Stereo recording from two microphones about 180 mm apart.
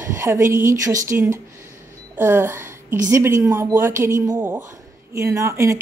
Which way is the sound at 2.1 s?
10° right (ahead or behind).